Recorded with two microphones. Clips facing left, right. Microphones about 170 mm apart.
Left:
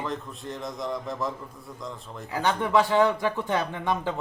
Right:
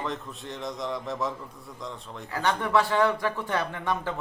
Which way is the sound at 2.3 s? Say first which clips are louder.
Left 1 dB; 15° left (ahead or behind).